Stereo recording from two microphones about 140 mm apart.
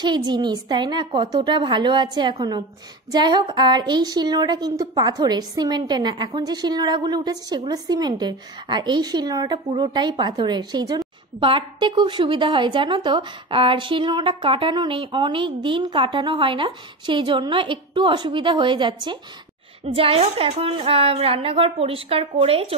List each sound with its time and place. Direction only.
0.0 s a woman's voice: 30° right (ahead or behind)
19.8 s a woman's voice: 45° right (ahead or behind)